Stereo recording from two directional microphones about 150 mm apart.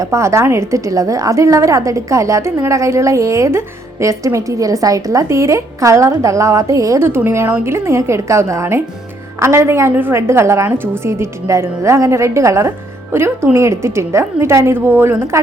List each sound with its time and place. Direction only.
0.0 s a woman's voice: 20° right (ahead or behind)